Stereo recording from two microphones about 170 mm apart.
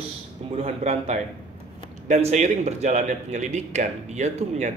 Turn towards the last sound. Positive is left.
turn(degrees=-40)  # may be behind; listen again after turning